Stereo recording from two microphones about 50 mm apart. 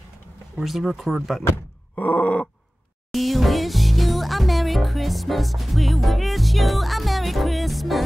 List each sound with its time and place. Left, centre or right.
0.6 s speech: centre
2.0 s groan: left
3.1 s music: centre